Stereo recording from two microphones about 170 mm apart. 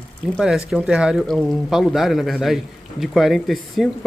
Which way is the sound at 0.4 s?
5° right (ahead or behind).